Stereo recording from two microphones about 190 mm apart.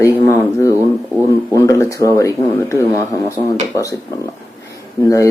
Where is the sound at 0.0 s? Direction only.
15° left (ahead or behind).